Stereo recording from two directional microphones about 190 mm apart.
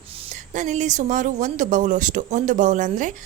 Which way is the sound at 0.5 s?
40° right (ahead or behind).